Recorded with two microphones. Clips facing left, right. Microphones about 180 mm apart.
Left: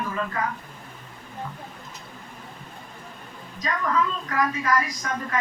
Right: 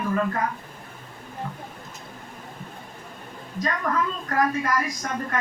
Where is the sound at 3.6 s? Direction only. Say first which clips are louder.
Even; 50° right (ahead or behind).